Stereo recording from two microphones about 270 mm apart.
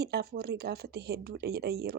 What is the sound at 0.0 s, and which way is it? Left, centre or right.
A woman's voice, right.